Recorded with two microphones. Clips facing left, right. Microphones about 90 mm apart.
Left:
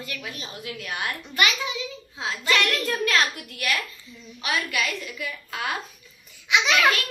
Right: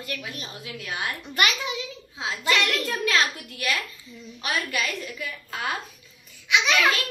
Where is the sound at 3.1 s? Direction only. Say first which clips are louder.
Right 2 dB; 25° right (ahead or behind).